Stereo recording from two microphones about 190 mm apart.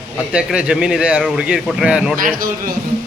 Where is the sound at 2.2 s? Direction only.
50° right (ahead or behind).